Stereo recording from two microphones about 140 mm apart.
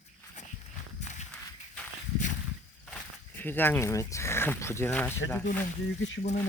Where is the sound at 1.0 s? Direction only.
60° left (ahead or behind).